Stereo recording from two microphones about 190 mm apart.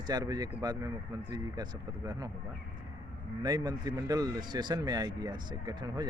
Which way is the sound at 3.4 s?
20° right (ahead or behind).